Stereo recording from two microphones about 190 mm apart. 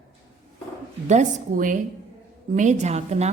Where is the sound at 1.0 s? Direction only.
40° right (ahead or behind).